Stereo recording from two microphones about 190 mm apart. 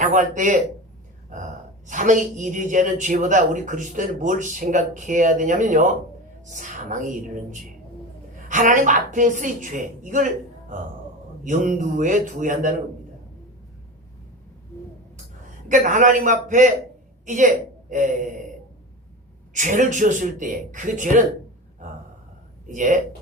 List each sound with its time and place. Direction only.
0.0 s a man's voice: 45° right (ahead or behind)
1.9 s a man's voice: 45° right (ahead or behind)
8.4 s a woman's voice: 40° right (ahead or behind)
15.7 s a woman's voice: 45° right (ahead or behind)
19.5 s a woman's voice: 40° right (ahead or behind)
22.6 s speech: 40° right (ahead or behind)